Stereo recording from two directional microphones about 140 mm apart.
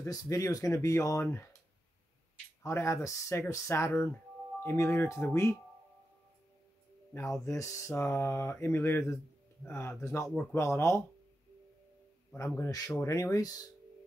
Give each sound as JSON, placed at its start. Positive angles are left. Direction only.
{"t": 0.0, "sound": "speech", "side_deg": 25}
{"t": 2.6, "sound": "speech", "side_deg": 20}
{"t": 7.4, "sound": "speech", "side_deg": 25}
{"t": 12.5, "sound": "speech", "side_deg": 25}